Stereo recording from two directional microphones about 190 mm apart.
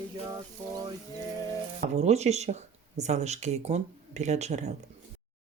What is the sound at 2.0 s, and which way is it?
Speech, 35° right (ahead or behind).